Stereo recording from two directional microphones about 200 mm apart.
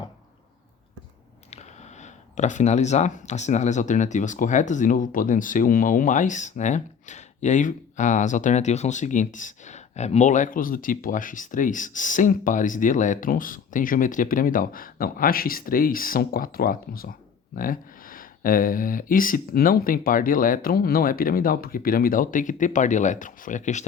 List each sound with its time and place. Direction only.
2.3 s speech: 40° left (ahead or behind)